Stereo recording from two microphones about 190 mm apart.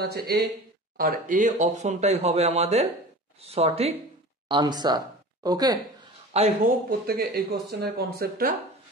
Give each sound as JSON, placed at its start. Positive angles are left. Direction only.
{"t": 0.0, "sound": "speech", "side_deg": -55}
{"t": 6.3, "sound": "speech", "side_deg": -35}
{"t": 6.9, "sound": "speech", "side_deg": -55}